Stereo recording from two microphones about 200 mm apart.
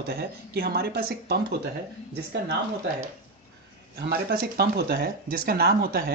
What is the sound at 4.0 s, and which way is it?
Speech, 50° right (ahead or behind).